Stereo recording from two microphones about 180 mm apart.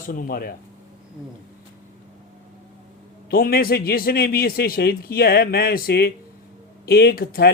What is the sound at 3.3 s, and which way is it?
A man's voice, 55° left (ahead or behind).